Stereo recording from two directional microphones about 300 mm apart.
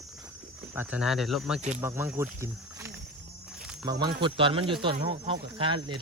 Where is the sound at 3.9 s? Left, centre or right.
Centre.